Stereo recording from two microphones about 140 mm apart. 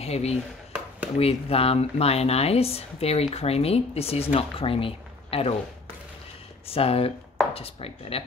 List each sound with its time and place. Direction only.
0.0 s speech: 50° left (ahead or behind)
6.7 s speech: 45° left (ahead or behind)